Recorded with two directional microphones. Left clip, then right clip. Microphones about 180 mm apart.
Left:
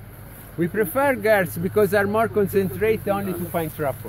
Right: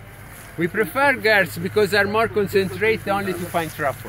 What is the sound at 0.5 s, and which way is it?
Speech, 50° left (ahead or behind).